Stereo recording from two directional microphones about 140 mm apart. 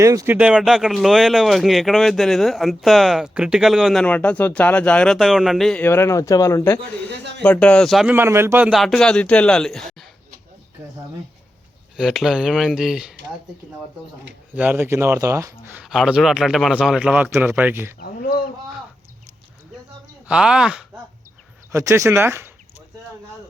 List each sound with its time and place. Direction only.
0.0 s speech: 20° right (ahead or behind)
0.3 s speech: 10° right (ahead or behind)
4.0 s speech: 10° left (ahead or behind)
5.8 s speech: 15° left (ahead or behind)
8.0 s a man's voice: 15° right (ahead or behind)
8.7 s speech: centre (ahead or behind)
11.9 s speech: centre (ahead or behind)
14.5 s a man's voice: 10° right (ahead or behind)
15.8 s a man's voice: 5° right (ahead or behind)
18.0 s speech: 90° left
20.2 s speech: 5° right (ahead or behind)
21.7 s speech: 20° right (ahead or behind)